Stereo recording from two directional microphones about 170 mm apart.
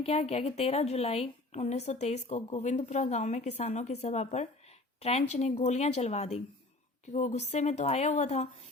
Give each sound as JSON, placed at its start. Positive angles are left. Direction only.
{"t": 0.0, "sound": "a woman's voice", "side_deg": 35}